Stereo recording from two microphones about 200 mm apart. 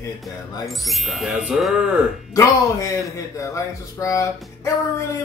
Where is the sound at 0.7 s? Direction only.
Centre (ahead or behind).